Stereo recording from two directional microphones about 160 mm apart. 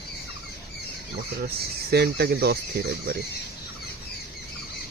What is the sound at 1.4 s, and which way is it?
Speech, 85° right.